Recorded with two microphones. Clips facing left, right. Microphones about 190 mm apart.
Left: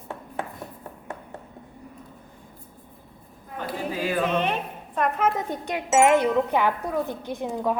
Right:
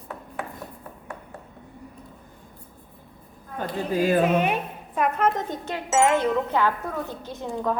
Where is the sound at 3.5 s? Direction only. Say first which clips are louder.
Right 4 dB; 45° right (ahead or behind).